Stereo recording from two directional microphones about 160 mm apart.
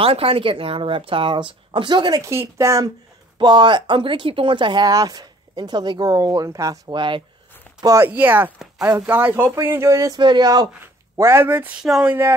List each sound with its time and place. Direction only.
0.0 s speech: 35° right (ahead or behind)
7.8 s speech: 15° right (ahead or behind)